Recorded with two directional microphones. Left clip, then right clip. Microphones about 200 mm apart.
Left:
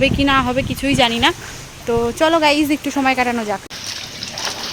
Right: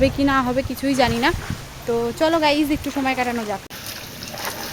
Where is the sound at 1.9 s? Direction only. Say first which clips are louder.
Left 4 dB; 25° left (ahead or behind).